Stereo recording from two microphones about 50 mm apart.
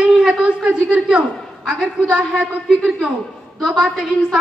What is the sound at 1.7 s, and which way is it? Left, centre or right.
Speech, centre.